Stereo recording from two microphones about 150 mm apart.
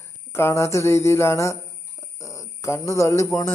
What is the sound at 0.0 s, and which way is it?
Speech, 15° left (ahead or behind).